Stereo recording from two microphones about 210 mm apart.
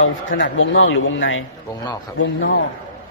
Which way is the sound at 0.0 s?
60° left (ahead or behind).